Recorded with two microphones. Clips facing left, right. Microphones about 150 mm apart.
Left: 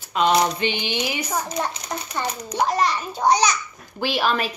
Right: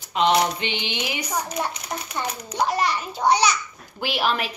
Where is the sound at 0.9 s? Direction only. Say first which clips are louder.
Left 2 dB; 10° left (ahead or behind).